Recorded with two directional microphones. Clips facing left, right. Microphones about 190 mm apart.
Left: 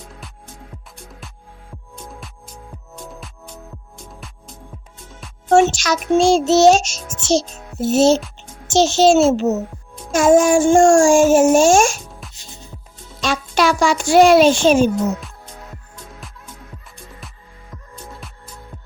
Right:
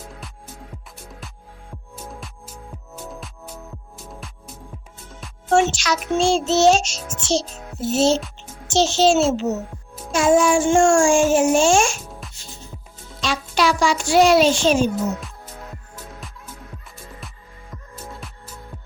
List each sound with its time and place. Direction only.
0.1 s music: centre (ahead or behind)
2.0 s music: centre (ahead or behind)
5.7 s a child's voice: 45° left (ahead or behind)
13.2 s a child's voice: 50° left (ahead or behind)
15.2 s music: centre (ahead or behind)